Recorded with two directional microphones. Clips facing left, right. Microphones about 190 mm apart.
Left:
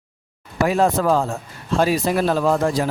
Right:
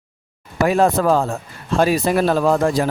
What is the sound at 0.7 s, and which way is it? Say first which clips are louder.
Speech: right 2 dB; 55° right (ahead or behind).